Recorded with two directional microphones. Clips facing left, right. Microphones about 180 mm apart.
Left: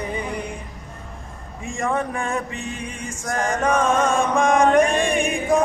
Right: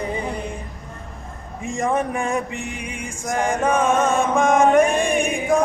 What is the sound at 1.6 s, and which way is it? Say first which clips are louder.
Speech: right 2 dB; 20° right (ahead or behind).